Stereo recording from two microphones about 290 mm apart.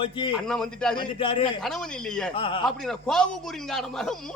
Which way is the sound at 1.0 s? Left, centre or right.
Centre.